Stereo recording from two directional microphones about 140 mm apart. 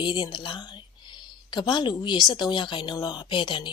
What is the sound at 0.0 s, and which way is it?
Speech, 35° left (ahead or behind).